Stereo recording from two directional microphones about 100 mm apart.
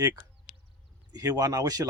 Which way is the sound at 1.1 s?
40° right (ahead or behind).